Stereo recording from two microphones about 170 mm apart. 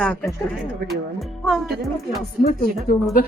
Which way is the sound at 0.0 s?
10° left (ahead or behind).